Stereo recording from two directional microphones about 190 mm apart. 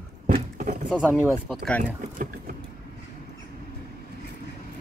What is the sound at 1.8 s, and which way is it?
Speech, 45° right (ahead or behind).